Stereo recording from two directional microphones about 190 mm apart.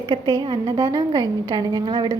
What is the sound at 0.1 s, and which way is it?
A woman's voice, 25° right (ahead or behind).